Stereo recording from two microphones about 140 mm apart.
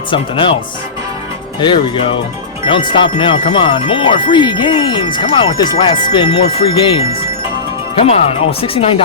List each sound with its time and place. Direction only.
0.1 s speech: 35° left (ahead or behind)
1.6 s speech: 40° left (ahead or behind)